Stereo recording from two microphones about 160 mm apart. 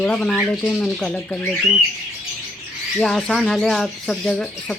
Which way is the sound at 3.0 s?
5° left (ahead or behind).